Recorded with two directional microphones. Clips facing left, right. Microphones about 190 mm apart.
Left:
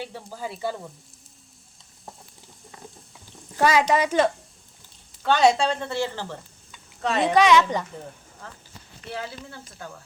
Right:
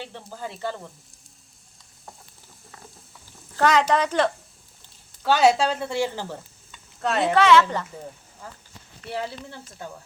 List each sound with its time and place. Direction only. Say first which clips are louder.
0.0 s speech: left 2 dB; 5° left (ahead or behind)
3.5 s speech: even; 10° left (ahead or behind)
5.2 s speech: right 1 dB; 5° right (ahead or behind)
6.7 s a sound: even; centre (ahead or behind)
7.3 s speech: even; 15° left (ahead or behind)
8.4 s speech: right 2 dB; 10° right (ahead or behind)
9.1 s speech: right 4 dB; 25° right (ahead or behind)